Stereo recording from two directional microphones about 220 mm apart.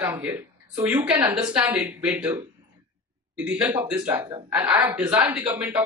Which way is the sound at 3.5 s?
10° right (ahead or behind).